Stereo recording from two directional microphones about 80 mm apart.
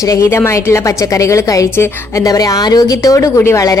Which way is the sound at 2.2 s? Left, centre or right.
Left.